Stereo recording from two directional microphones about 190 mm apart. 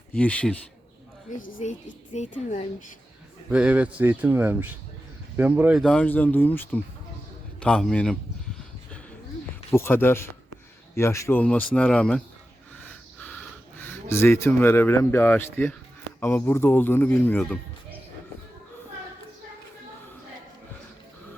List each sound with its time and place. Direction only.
0.1 s speech: 5° left (ahead or behind)
1.3 s a woman's voice: 45° left (ahead or behind)
3.5 s speech: 5° right (ahead or behind)
5.8 s a man's voice: 5° left (ahead or behind)
9.7 s speech: 10° left (ahead or behind)
13.7 s speech: 10° left (ahead or behind)